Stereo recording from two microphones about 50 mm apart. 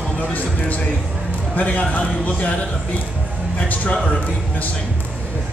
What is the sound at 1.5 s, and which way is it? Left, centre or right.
Speech, left.